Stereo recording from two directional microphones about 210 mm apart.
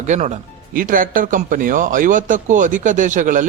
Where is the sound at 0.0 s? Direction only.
35° right (ahead or behind).